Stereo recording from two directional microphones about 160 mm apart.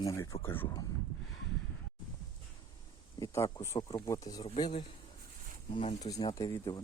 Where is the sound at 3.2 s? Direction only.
20° left (ahead or behind).